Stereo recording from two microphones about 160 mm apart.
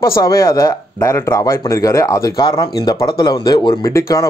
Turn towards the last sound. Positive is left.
turn(degrees=20)  # may be behind; listen again after turning